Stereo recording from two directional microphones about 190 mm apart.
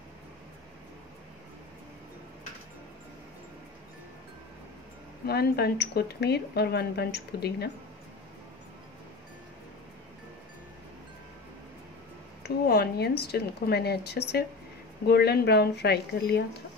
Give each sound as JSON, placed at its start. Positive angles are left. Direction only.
{"t": 5.2, "sound": "speech", "side_deg": 55}
{"t": 12.4, "sound": "speech", "side_deg": 55}